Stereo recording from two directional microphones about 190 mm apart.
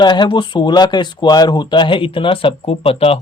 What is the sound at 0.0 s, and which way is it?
Speech, 25° left (ahead or behind).